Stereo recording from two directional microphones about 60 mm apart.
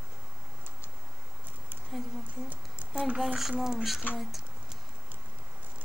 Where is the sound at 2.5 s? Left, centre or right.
Centre.